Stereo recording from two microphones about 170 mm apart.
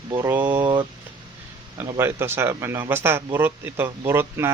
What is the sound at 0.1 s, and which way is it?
Speech, 15° right (ahead or behind).